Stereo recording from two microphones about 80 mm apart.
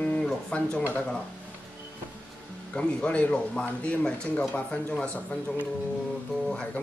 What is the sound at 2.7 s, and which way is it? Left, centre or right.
Speech, centre.